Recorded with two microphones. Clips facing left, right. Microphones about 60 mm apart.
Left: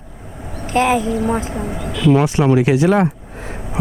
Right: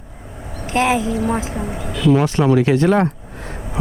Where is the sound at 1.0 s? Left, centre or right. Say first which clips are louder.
Left 1 dB; left.